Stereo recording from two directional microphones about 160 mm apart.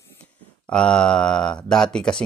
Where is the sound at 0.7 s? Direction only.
5° left (ahead or behind).